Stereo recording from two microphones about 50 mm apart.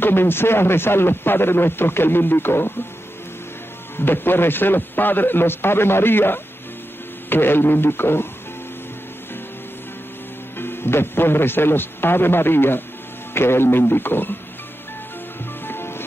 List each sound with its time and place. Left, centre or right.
0.0 s speech: left
3.9 s speech: left
10.6 s speech: left
15.6 s music: left